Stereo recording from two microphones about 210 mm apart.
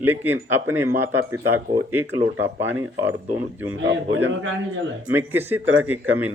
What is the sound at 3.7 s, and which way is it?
A man's voice, 65° right (ahead or behind).